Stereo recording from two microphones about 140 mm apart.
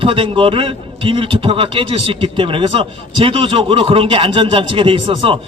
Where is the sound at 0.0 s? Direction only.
40° right (ahead or behind).